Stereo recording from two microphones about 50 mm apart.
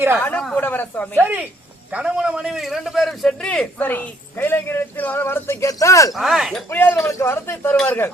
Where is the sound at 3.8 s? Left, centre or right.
Left.